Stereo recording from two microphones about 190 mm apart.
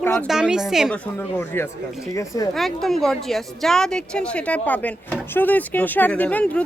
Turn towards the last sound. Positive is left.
turn(degrees=5)  # may be behind; listen again after turning